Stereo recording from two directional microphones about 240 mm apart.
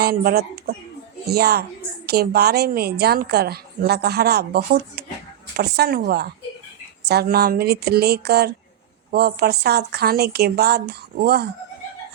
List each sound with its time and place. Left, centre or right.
0.0 s a woman's voice: right